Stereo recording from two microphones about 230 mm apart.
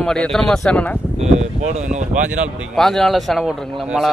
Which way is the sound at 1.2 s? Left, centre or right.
Right.